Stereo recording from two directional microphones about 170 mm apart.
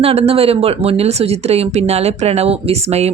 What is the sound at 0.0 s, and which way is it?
Speech, 35° right (ahead or behind).